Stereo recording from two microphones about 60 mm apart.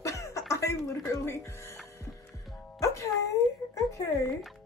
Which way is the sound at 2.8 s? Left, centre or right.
Left.